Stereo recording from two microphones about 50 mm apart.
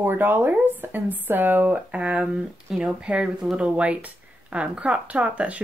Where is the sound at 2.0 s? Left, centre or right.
Right.